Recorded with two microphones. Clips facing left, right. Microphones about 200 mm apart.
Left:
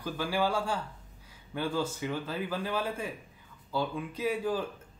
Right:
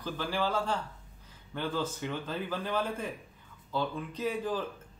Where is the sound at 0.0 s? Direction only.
10° left (ahead or behind).